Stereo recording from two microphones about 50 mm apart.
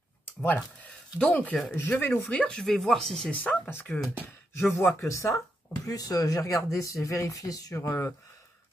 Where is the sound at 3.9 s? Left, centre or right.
Centre.